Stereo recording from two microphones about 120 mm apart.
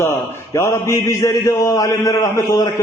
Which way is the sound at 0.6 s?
25° left (ahead or behind).